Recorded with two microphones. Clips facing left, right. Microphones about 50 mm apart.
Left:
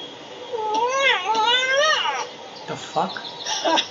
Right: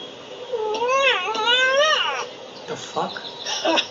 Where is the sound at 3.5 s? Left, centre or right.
Right.